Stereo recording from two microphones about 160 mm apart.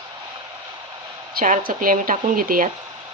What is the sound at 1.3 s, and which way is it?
Speech, 55° right (ahead or behind).